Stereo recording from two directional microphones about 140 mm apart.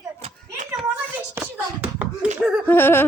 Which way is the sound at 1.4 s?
10° right (ahead or behind).